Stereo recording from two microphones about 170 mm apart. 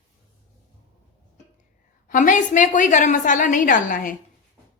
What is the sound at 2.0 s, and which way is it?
A woman's voice, 50° left (ahead or behind).